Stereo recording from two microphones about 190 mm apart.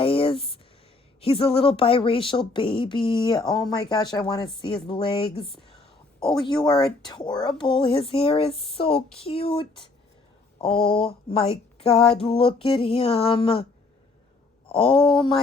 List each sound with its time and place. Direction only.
0.0 s a sound: 30° left (ahead or behind)
1.2 s speech: 30° left (ahead or behind)
14.7 s speech: 25° left (ahead or behind)